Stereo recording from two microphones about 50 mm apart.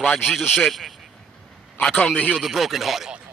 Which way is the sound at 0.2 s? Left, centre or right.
Centre.